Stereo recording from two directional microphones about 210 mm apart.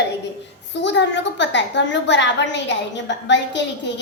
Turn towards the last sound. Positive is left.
turn(degrees=55)  # may be behind; listen again after turning